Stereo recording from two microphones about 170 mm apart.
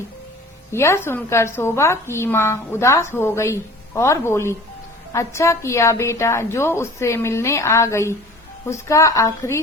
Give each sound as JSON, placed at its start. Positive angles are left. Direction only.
{"t": 0.7, "sound": "a woman's voice", "side_deg": 15}